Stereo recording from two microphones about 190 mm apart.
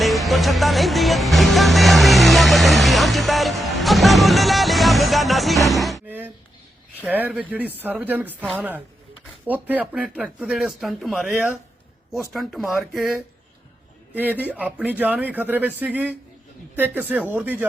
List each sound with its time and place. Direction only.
0.0 s music: centre (ahead or behind)
7.0 s a man's voice: 10° right (ahead or behind)